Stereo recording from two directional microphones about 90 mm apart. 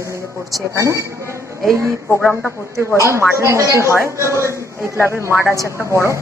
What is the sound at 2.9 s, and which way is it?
A man's voice, 30° right (ahead or behind).